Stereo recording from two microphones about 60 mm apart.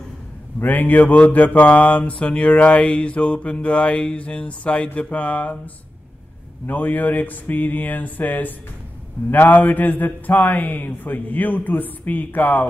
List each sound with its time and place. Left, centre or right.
0.6 s mantra: left
6.6 s mantra: left